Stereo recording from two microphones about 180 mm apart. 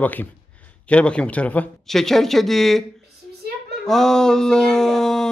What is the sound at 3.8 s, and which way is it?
Speech, 5° left (ahead or behind).